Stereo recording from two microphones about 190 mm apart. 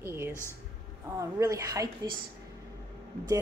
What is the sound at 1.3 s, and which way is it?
Speech, 15° right (ahead or behind).